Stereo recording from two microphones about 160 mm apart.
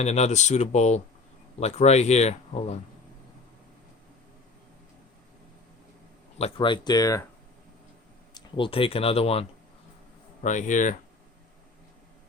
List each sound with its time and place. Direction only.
0.0 s speech: 45° left (ahead or behind)
6.4 s speech: 30° left (ahead or behind)
8.3 s speech: 30° left (ahead or behind)
10.4 s speech: 50° left (ahead or behind)